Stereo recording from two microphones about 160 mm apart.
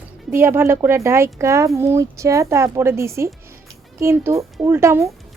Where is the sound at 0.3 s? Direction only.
15° right (ahead or behind).